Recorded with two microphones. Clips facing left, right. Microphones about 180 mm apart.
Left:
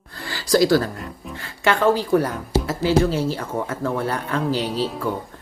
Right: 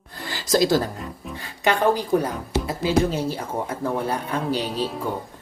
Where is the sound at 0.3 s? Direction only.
20° right (ahead or behind).